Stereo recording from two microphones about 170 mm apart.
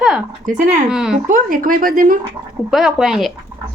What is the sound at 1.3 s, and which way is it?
Speech, 55° right (ahead or behind).